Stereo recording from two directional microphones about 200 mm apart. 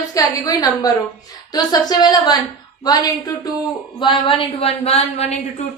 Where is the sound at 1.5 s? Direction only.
20° left (ahead or behind).